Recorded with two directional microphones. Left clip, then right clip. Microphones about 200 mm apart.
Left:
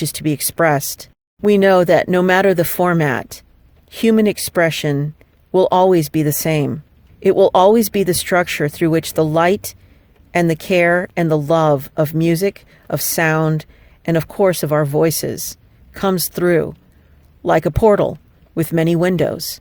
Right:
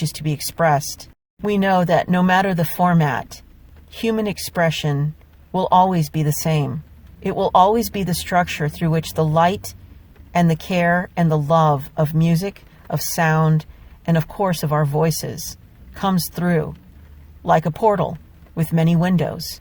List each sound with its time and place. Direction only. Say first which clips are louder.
0.0 s speech: left 6 dB; 55° left (ahead or behind)